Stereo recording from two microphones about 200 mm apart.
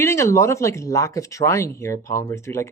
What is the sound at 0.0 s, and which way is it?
Speech, 15° left (ahead or behind).